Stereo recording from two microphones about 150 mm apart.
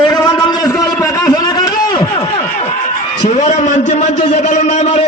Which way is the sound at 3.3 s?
55° left (ahead or behind).